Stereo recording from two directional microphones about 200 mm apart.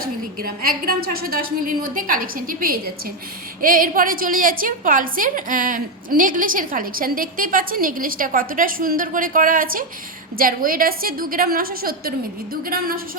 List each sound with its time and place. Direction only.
0.0 s a woman's voice: 50° right (ahead or behind)